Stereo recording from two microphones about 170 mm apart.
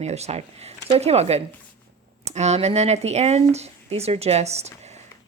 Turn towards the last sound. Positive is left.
turn(degrees=-40)  # may be behind; listen again after turning